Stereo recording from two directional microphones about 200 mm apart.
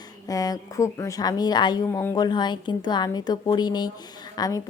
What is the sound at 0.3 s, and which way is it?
Speech, 20° left (ahead or behind).